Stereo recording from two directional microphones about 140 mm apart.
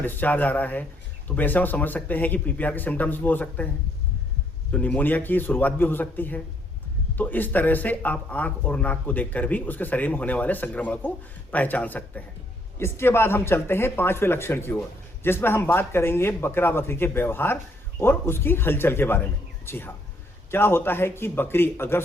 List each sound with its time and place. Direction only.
0.0 s speech: 15° left (ahead or behind)
4.7 s speech: 10° left (ahead or behind)